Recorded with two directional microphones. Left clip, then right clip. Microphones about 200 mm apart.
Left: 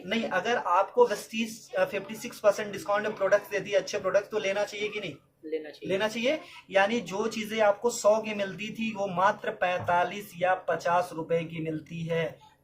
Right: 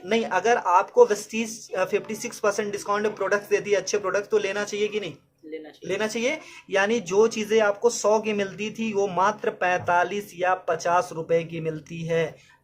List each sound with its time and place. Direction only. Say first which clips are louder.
0.1 s speech: right 6 dB; 50° right (ahead or behind)